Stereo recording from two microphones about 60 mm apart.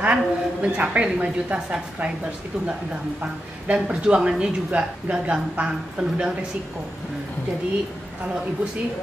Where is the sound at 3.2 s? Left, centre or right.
Centre.